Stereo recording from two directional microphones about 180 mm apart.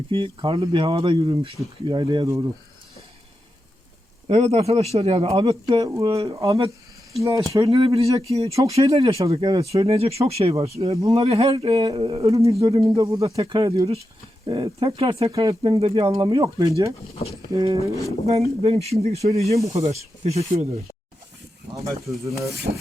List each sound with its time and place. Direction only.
0.1 s speech: 25° right (ahead or behind)
4.3 s speech: 35° right (ahead or behind)
6.1 s speech: 30° right (ahead or behind)
6.3 s speech: 20° right (ahead or behind)
13.2 s speech: 30° right (ahead or behind)
18.3 s speech: 35° right (ahead or behind)
21.8 s speech: 15° right (ahead or behind)
22.7 s speech: 50° right (ahead or behind)